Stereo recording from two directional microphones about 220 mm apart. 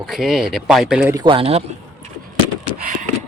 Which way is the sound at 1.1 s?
20° right (ahead or behind).